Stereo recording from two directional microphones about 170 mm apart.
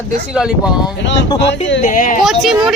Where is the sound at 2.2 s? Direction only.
Centre (ahead or behind).